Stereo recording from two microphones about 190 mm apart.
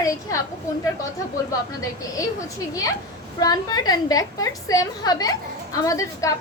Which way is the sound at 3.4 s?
20° left (ahead or behind).